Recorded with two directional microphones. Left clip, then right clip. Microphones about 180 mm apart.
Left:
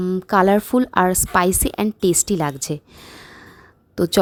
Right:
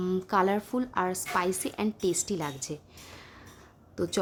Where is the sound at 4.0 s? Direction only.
45° left (ahead or behind).